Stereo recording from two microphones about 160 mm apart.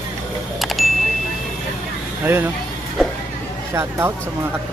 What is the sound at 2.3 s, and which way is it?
Speech, 15° right (ahead or behind).